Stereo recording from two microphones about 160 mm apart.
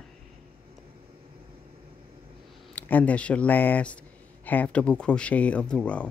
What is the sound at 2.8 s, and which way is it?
Speech, 10° left (ahead or behind).